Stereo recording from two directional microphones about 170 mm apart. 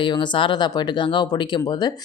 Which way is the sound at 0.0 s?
25° left (ahead or behind).